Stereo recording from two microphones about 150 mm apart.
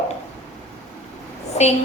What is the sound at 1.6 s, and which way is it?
Speech, 45° left (ahead or behind).